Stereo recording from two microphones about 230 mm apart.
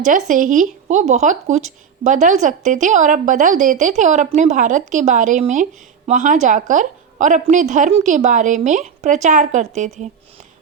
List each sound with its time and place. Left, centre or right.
0.0 s speech: right